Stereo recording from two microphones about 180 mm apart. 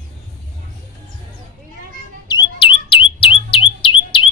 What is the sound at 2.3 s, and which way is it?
Bird, 30° left (ahead or behind).